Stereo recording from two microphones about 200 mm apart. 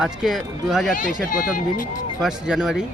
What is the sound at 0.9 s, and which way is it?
Speech, 40° left (ahead or behind).